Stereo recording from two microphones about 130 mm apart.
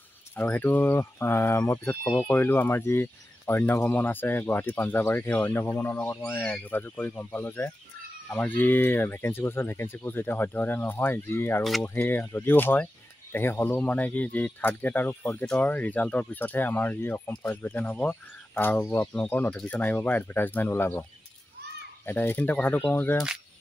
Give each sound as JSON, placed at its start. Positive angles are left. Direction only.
{"t": 0.4, "sound": "speech", "side_deg": 15}
{"t": 22.0, "sound": "speech", "side_deg": 15}